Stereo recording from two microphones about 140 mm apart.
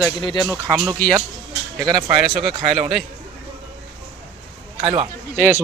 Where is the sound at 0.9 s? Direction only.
10° left (ahead or behind).